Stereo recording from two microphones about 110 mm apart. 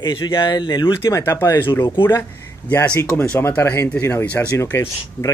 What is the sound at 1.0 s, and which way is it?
Speech, 25° left (ahead or behind).